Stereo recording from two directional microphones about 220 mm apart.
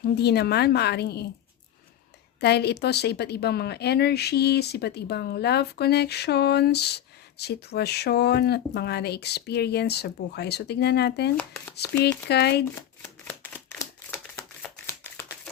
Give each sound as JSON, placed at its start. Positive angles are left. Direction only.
{"t": 0.0, "sound": "a woman's voice", "side_deg": 50}
{"t": 2.4, "sound": "a woman's voice", "side_deg": 50}
{"t": 11.3, "sound": "speech", "side_deg": 10}
{"t": 12.3, "sound": "a woman's voice", "side_deg": 50}
{"t": 13.0, "sound": "single-lens reflex camera", "side_deg": 10}
{"t": 14.8, "sound": "typewriter", "side_deg": 10}